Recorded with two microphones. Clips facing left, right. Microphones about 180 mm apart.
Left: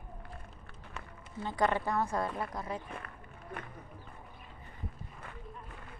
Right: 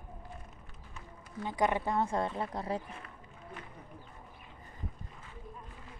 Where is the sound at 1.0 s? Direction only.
70° left (ahead or behind).